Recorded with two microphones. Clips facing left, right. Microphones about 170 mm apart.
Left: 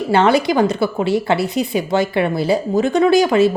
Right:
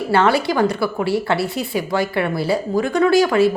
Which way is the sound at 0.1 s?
20° left (ahead or behind).